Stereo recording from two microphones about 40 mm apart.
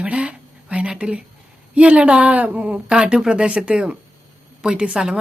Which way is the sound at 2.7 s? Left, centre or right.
Right.